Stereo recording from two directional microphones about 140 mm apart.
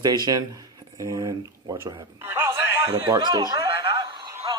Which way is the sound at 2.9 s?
30° right (ahead or behind).